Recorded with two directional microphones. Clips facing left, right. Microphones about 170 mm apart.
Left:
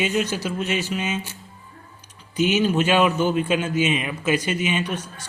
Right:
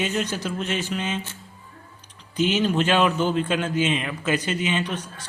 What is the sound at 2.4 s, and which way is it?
A man's voice, 10° left (ahead or behind).